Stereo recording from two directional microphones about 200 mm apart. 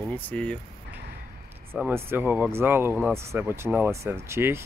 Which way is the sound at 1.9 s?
10° right (ahead or behind).